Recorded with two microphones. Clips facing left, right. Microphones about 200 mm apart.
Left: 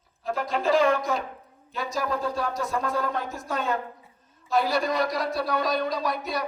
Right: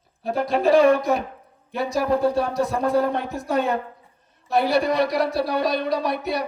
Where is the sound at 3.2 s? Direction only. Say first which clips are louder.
Right 7 dB; 65° right (ahead or behind).